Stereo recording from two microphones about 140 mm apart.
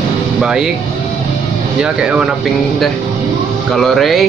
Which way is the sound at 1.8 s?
10° right (ahead or behind).